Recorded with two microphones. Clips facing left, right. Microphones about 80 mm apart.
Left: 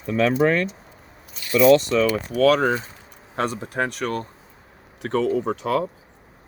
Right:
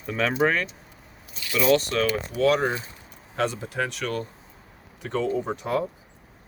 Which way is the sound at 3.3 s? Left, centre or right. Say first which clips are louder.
Left 2 dB; left.